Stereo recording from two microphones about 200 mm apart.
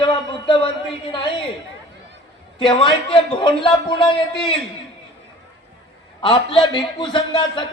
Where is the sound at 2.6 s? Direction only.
25° left (ahead or behind).